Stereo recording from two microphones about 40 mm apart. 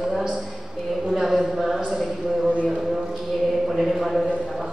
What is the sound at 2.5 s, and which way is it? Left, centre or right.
Clip-clop, right.